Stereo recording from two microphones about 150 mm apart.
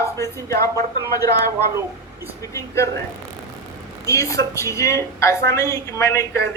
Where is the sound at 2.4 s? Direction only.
20° left (ahead or behind).